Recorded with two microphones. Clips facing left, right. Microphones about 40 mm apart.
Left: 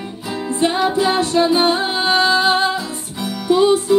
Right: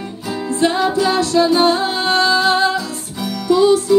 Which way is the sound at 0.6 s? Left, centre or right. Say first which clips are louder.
Right 1 dB; centre.